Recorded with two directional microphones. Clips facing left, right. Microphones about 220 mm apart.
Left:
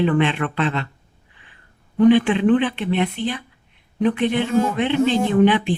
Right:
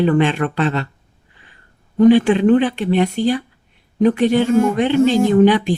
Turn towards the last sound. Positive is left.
turn(degrees=-40)  # may be behind; listen again after turning